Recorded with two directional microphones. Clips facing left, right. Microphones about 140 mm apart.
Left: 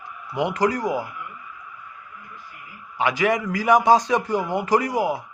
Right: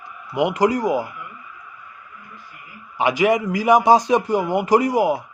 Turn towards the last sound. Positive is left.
turn(degrees=-15)  # may be behind; listen again after turning